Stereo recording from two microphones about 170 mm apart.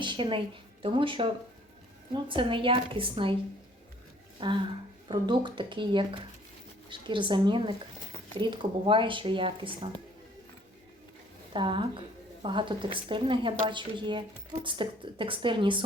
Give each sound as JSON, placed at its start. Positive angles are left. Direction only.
{"t": 0.0, "sound": "a woman's voice", "side_deg": -30}
{"t": 4.4, "sound": "a woman's voice", "side_deg": -30}
{"t": 11.5, "sound": "a woman's voice", "side_deg": -30}